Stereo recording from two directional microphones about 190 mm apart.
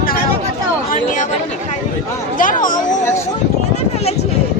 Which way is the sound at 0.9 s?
45° left (ahead or behind).